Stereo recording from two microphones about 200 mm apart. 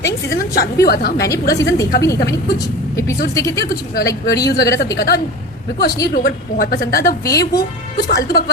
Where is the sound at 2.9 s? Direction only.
15° left (ahead or behind).